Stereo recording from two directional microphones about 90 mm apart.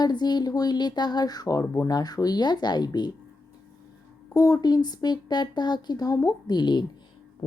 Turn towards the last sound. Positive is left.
turn(degrees=55)  # may be behind; listen again after turning